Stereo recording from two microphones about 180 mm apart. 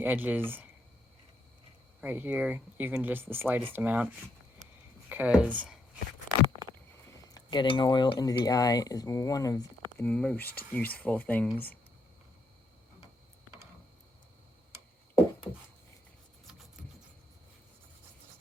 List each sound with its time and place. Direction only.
0.0 s speech: 10° right (ahead or behind)
2.0 s speech: 10° right (ahead or behind)
7.3 s speech: 25° left (ahead or behind)
10.0 s speech: 5° left (ahead or behind)